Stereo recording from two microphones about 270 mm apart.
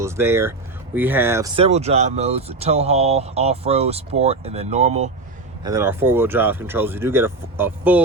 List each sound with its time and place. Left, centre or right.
0.0 s speech: centre
1.5 s speech: right
5.6 s speech: centre